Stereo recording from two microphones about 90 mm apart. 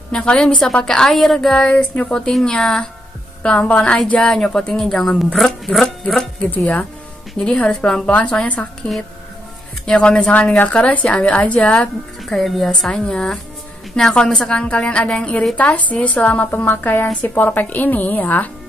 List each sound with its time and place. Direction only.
0.1 s a woman's voice: 10° left (ahead or behind)
6.5 s a woman's voice: 15° left (ahead or behind)